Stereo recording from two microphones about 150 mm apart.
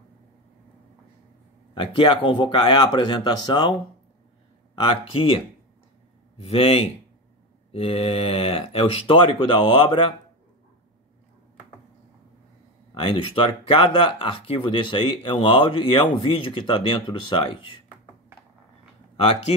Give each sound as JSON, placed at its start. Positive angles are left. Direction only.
{"t": 1.7, "sound": "speech", "side_deg": 35}
{"t": 4.8, "sound": "speech", "side_deg": 35}
{"t": 13.0, "sound": "speech", "side_deg": 35}